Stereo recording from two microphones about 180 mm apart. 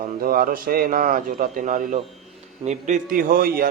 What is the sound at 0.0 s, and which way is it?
A man's voice, 50° right (ahead or behind).